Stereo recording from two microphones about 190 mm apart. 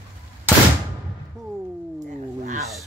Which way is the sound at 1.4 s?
5° left (ahead or behind).